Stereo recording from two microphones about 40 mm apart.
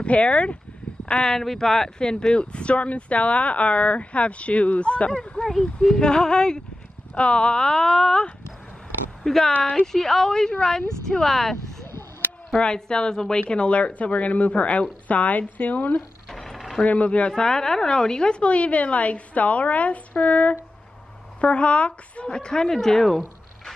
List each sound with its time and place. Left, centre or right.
0.0 s speech: left
1.0 s a sound: left
1.3 s speech: centre; by 5.1 s left
5.5 s speech: centre
5.9 s speech: centre
13.4 s speech: left
16.3 s mechanisms: centre
16.8 s speech: left
17.3 s speech: centre